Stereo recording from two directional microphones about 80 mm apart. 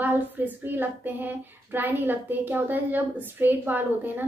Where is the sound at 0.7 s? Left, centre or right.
Right.